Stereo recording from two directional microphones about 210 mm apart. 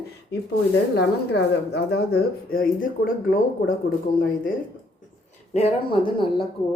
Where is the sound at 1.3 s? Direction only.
50° left (ahead or behind).